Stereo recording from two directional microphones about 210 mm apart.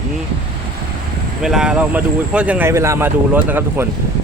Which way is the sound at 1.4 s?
5° right (ahead or behind).